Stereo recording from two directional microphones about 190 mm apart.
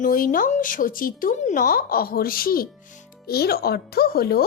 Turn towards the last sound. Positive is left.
turn(degrees=55)  # may be behind; listen again after turning